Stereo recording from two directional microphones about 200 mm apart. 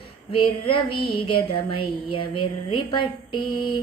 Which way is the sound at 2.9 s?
25° left (ahead or behind).